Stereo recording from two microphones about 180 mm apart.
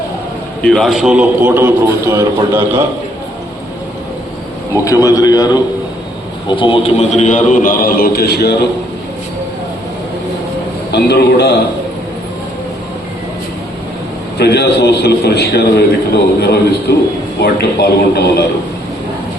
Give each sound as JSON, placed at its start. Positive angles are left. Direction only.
{"t": 0.6, "sound": "a man's voice", "side_deg": 0}
{"t": 4.9, "sound": "a man's voice", "side_deg": 20}
{"t": 10.9, "sound": "a man's voice", "side_deg": 65}
{"t": 14.3, "sound": "a man's voice", "side_deg": 65}